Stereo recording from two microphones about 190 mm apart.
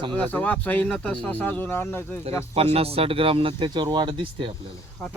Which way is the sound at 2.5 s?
30° right (ahead or behind).